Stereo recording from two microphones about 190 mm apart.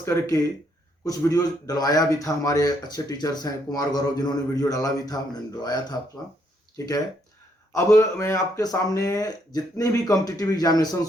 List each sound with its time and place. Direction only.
0.0 s a man's voice: 15° left (ahead or behind)